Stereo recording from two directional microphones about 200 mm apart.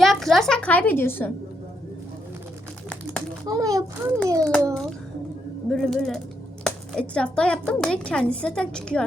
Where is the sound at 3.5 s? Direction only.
15° right (ahead or behind).